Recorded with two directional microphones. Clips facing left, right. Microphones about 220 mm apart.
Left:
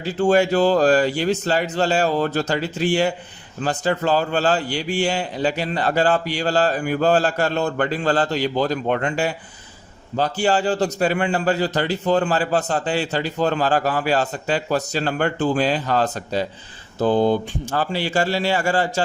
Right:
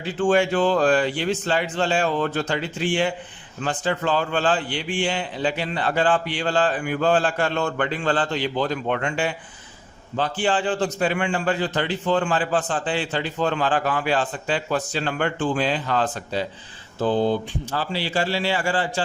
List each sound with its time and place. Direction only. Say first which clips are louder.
0.0 s a man's voice: left 2 dB; 40° left (ahead or behind)